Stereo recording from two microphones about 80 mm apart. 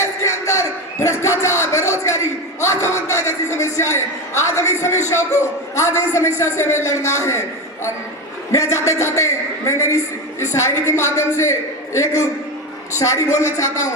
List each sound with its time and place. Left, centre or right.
0.0 s music: left
1.4 s a sound: left
2.6 s a man's voice: left
8.5 s a man's voice: left